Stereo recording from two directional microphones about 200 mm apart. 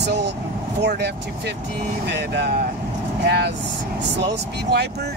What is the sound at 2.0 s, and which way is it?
Speech, 55° right (ahead or behind).